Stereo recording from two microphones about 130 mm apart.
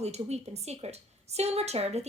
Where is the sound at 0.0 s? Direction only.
55° right (ahead or behind).